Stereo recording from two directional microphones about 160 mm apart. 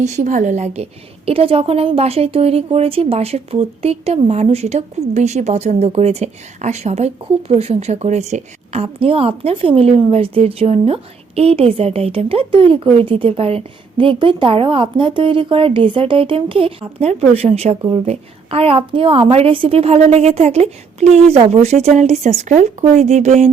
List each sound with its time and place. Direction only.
0.0 s a woman's voice: 50° right (ahead or behind)